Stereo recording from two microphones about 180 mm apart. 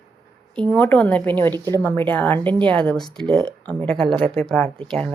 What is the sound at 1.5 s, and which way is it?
Speech, 20° right (ahead or behind).